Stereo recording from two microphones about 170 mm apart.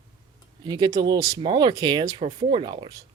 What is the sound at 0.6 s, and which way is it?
Speech, 25° right (ahead or behind).